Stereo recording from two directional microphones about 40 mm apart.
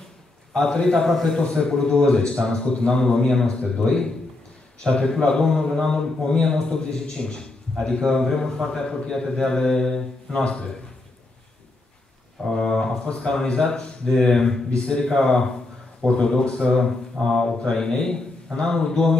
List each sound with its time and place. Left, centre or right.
0.5 s a man's voice: centre
1.1 s a man's voice: centre
1.4 s a man's voice: centre
12.5 s a man's voice: centre